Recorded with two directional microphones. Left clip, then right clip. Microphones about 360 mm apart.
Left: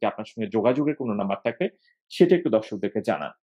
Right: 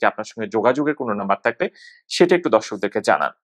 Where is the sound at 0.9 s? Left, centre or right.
Centre.